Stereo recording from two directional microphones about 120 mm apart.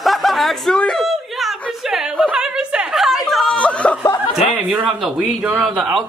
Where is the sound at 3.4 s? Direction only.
10° left (ahead or behind).